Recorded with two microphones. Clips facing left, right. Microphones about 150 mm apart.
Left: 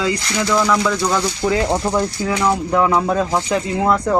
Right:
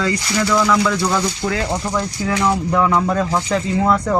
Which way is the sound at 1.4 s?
20° left (ahead or behind).